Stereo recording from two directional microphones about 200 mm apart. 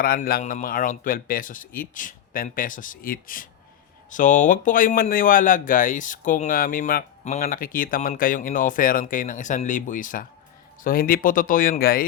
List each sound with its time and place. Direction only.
0.0 s a man's voice: 45° left (ahead or behind)